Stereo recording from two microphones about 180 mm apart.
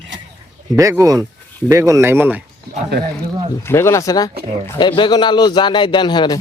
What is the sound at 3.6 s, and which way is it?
A man's voice, 15° left (ahead or behind).